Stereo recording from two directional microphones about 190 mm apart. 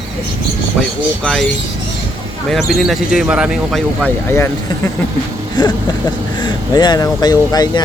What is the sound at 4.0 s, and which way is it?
Speech, 10° left (ahead or behind).